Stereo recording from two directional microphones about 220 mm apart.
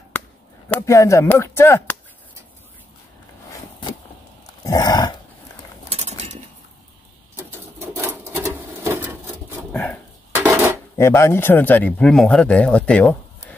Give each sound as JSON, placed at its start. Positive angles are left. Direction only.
{"t": 0.7, "sound": "speech", "side_deg": 15}
{"t": 4.6, "sound": "a sound", "side_deg": 15}
{"t": 5.9, "sound": "a sound", "side_deg": -30}
{"t": 7.9, "sound": "sewing machine", "side_deg": -10}
{"t": 9.7, "sound": "dog", "side_deg": 5}
{"t": 10.4, "sound": "dishes", "side_deg": -10}
{"t": 11.0, "sound": "speech", "side_deg": 10}